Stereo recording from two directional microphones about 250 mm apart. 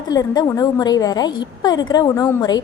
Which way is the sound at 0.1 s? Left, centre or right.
Centre.